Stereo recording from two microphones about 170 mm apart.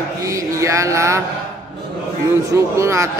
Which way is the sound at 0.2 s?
20° right (ahead or behind).